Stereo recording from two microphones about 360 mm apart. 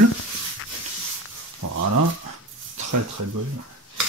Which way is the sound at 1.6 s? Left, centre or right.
Right.